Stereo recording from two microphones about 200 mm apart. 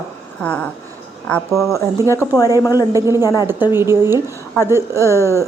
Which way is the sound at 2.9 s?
15° right (ahead or behind).